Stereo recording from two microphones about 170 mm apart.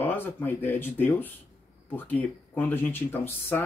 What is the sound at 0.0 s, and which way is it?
Speech, 10° left (ahead or behind).